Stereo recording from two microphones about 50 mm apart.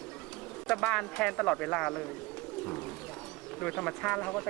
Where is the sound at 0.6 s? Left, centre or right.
Centre.